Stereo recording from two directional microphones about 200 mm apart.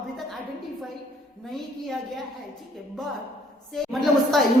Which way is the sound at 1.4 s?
Centre (ahead or behind).